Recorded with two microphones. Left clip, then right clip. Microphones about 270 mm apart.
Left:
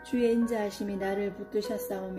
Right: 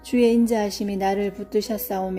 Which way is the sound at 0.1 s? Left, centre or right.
Right.